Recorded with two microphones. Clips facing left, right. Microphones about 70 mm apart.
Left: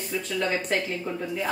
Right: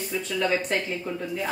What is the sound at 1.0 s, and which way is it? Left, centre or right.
Speech, centre.